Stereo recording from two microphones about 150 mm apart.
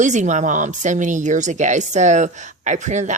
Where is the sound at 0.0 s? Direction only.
55° right (ahead or behind).